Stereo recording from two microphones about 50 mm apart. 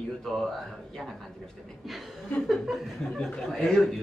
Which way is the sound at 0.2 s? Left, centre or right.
Centre.